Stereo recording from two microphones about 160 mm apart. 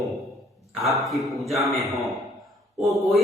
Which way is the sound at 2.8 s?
Centre (ahead or behind).